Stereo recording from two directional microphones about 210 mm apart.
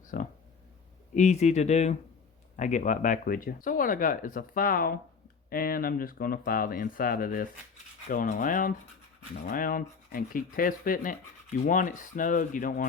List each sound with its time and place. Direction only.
0.1 s speech: 40° left (ahead or behind)